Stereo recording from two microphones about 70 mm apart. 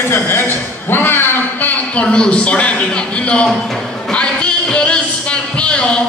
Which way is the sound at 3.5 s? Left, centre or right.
Centre.